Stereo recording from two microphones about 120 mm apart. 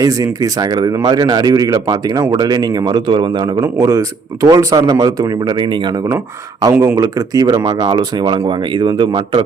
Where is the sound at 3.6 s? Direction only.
25° right (ahead or behind).